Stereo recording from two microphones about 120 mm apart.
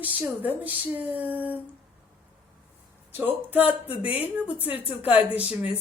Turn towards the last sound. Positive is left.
turn(degrees=-10)  # may be behind; listen again after turning